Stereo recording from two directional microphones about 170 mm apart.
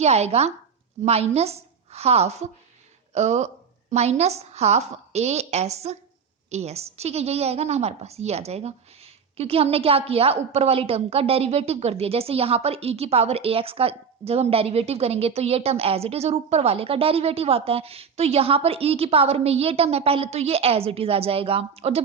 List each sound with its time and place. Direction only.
0.0 s a woman's voice: 40° right (ahead or behind)